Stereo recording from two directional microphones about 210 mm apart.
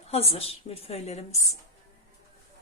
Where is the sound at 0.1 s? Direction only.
30° left (ahead or behind).